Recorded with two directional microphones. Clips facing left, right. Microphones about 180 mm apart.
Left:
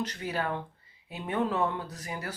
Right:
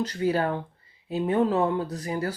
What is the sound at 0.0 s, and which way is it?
Speech, 35° right (ahead or behind).